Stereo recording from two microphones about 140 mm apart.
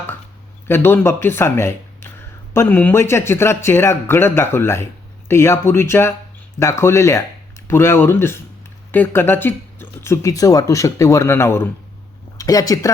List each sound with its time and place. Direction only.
0.7 s speech: 15° left (ahead or behind)